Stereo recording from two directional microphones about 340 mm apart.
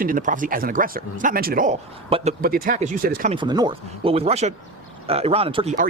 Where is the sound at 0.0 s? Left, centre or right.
Right.